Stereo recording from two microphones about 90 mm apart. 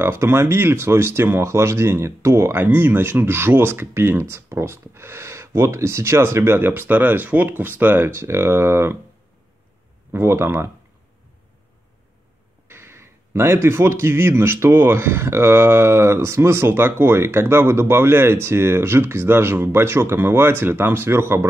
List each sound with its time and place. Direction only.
0.0 s speech: 25° right (ahead or behind)
10.1 s speech: 30° right (ahead or behind)
12.6 s speech: 25° right (ahead or behind)